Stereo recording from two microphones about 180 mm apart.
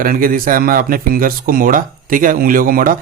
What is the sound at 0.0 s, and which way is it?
Speech, 55° right (ahead or behind).